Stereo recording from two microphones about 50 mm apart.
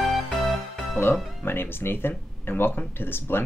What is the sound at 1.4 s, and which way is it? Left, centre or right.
Speech, left.